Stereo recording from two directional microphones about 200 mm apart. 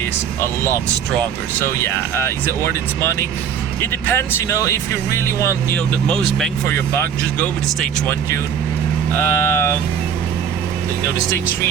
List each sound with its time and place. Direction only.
0.4 s speech: 10° left (ahead or behind)
6.1 s speech: 5° left (ahead or behind)